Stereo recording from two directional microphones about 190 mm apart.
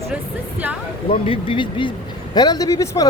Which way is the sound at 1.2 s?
30° left (ahead or behind).